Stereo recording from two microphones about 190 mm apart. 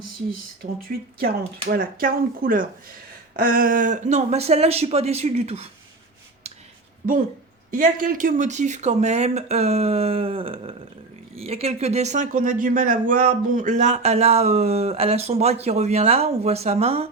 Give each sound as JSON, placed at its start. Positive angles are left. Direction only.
{"t": 0.3, "sound": "speech", "side_deg": -50}
{"t": 7.7, "sound": "speech", "side_deg": -45}